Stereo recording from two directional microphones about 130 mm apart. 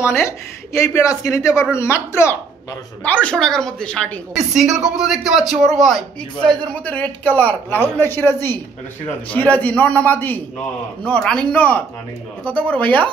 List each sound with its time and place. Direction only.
0.7 s a man's voice: 20° left (ahead or behind)
4.3 s a woman's voice: 5° right (ahead or behind)